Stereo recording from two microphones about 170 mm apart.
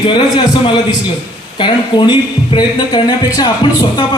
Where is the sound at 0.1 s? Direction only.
30° left (ahead or behind).